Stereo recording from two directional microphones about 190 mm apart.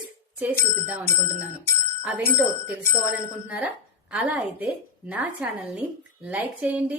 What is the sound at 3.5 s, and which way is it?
A woman's voice, 5° right (ahead or behind).